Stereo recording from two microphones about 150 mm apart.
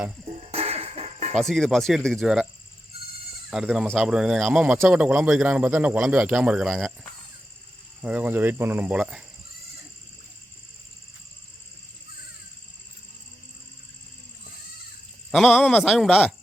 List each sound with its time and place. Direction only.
0.3 s music: 40° right (ahead or behind)
1.4 s a man's voice: centre (ahead or behind)
3.5 s a man's voice: 5° right (ahead or behind)
8.0 s speech: 10° right (ahead or behind)
15.3 s a man's voice: centre (ahead or behind)